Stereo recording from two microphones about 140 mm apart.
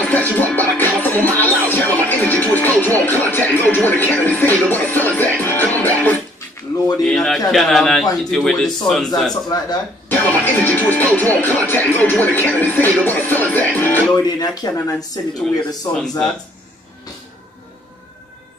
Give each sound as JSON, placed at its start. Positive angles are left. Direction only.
{"t": 0.0, "sound": "music", "side_deg": 10}
{"t": 6.7, "sound": "a sound", "side_deg": 25}
{"t": 7.1, "sound": "a man's voice", "side_deg": 5}
{"t": 14.1, "sound": "speech", "side_deg": 25}
{"t": 15.9, "sound": "a man's voice", "side_deg": 5}